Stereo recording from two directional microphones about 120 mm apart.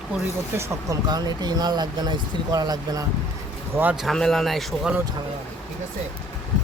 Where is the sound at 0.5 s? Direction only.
25° right (ahead or behind).